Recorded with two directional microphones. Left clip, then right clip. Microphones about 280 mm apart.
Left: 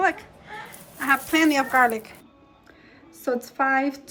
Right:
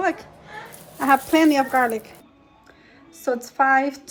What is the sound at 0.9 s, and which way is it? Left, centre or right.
A woman's voice, centre.